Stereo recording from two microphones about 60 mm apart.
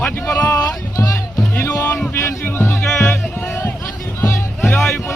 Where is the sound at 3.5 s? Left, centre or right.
Left.